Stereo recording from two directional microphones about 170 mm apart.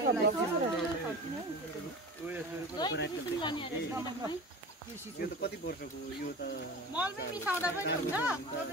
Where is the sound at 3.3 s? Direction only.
25° left (ahead or behind).